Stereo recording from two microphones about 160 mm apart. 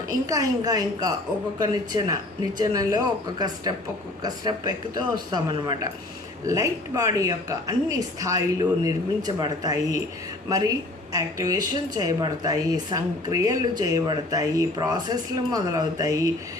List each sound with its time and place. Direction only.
0.1 s a woman's voice: 25° right (ahead or behind)